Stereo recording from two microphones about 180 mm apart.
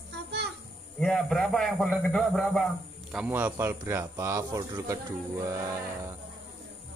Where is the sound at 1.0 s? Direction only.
Centre (ahead or behind); by 6.1 s 15° right (ahead or behind).